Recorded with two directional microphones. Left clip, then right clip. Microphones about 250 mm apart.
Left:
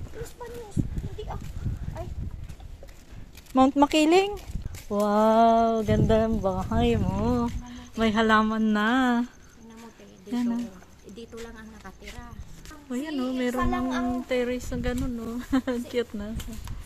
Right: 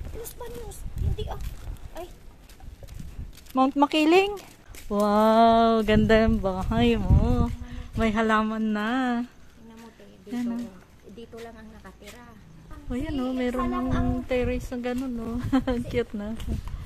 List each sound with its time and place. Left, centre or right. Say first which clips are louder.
1.1 s a sound: right 2 dB; right
3.5 s speech: left 1 dB; centre
7.2 s speech: left 1 dB; centre
10.3 s speech: left 2 dB; centre
12.9 s speech: even; centre